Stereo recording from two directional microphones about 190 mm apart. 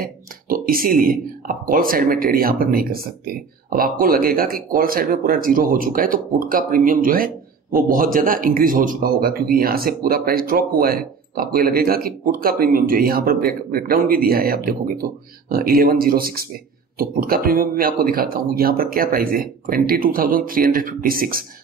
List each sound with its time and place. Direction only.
0.0 s a man's voice: 50° right (ahead or behind)